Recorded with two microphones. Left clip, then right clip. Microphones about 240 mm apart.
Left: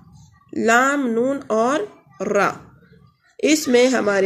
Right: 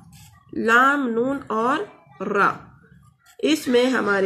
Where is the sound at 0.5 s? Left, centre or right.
Left.